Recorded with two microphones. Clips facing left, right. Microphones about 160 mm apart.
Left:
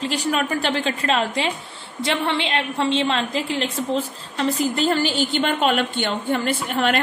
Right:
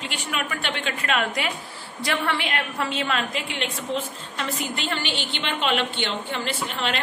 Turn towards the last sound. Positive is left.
turn(degrees=50)  # may be behind; listen again after turning